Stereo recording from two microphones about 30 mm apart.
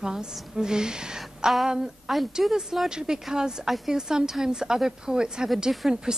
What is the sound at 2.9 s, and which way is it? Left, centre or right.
Speech, right.